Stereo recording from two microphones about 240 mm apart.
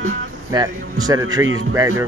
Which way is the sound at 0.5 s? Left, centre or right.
Centre.